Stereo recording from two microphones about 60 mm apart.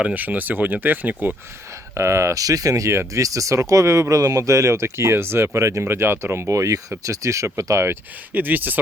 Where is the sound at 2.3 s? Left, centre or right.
Right.